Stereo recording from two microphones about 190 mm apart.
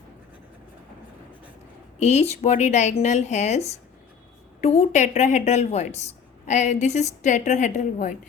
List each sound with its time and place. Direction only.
2.0 s a woman's voice: 35° left (ahead or behind)